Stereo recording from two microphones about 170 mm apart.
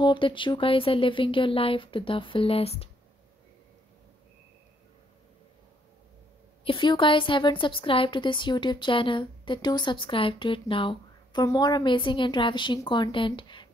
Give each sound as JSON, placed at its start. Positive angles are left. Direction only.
{"t": 0.0, "sound": "speech", "side_deg": 30}
{"t": 6.6, "sound": "a woman's voice", "side_deg": 30}